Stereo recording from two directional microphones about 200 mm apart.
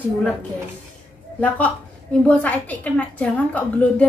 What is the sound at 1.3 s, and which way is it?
A woman's voice, 5° left (ahead or behind).